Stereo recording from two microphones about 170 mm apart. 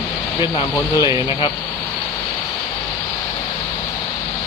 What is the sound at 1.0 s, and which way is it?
Speech, 20° right (ahead or behind).